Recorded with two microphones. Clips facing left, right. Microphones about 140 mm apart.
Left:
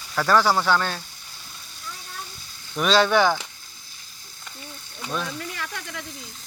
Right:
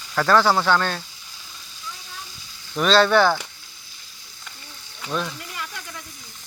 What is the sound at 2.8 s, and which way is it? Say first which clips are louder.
Speech: right 2 dB; 10° left (ahead or behind).